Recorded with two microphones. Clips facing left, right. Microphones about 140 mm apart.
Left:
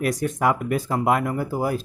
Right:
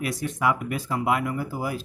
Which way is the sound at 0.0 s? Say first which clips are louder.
Left 4 dB; 45° left (ahead or behind).